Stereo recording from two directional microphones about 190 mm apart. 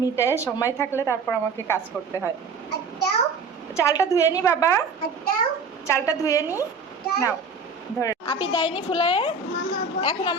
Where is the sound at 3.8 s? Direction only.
15° left (ahead or behind).